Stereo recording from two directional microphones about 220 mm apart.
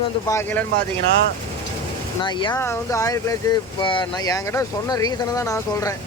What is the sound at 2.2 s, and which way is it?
Speech, 20° left (ahead or behind).